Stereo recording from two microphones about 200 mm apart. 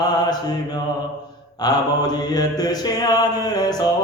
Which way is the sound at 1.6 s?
20° left (ahead or behind).